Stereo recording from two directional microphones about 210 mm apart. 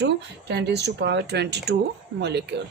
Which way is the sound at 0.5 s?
50° right (ahead or behind).